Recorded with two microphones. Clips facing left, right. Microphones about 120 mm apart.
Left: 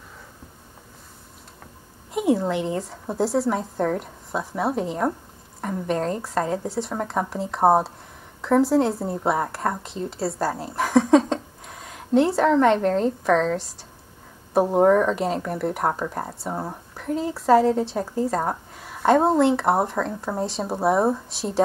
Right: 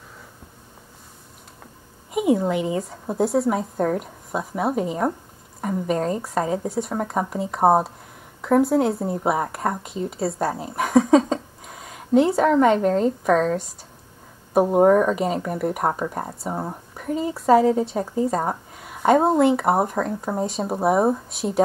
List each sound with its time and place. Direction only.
2.0 s a woman's voice: 5° right (ahead or behind)